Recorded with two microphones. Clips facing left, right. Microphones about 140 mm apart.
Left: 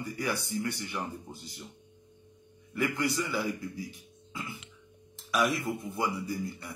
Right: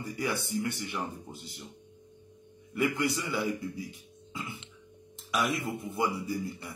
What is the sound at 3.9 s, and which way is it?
Speech, 25° right (ahead or behind).